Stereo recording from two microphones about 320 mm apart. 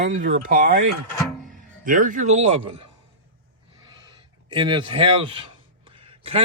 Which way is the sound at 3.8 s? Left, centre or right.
Centre.